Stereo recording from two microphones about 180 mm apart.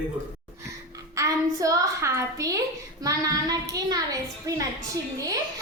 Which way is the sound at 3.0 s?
20° right (ahead or behind).